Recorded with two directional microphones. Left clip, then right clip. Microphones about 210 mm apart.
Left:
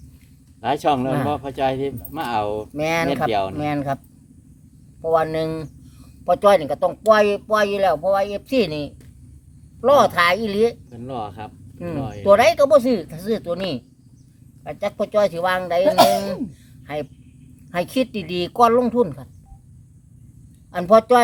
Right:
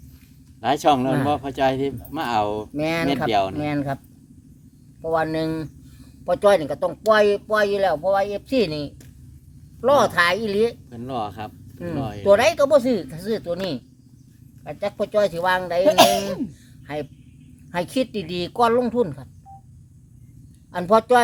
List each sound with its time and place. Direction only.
0.6 s speech: 15° right (ahead or behind)
2.7 s speech: 5° right (ahead or behind)
3.6 s speech: centre (ahead or behind)
5.0 s speech: 5° right (ahead or behind)
10.8 s speech: 15° right (ahead or behind)
11.8 s speech: 5° right (ahead or behind)
20.7 s speech: 5° right (ahead or behind)